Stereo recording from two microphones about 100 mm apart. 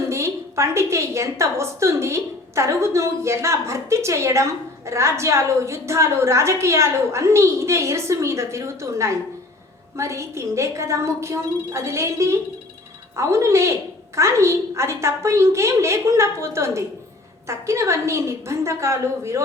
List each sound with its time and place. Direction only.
0.1 s a woman's voice: 30° right (ahead or behind)